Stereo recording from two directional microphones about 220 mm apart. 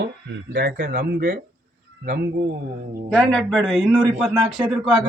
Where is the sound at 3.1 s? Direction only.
5° left (ahead or behind).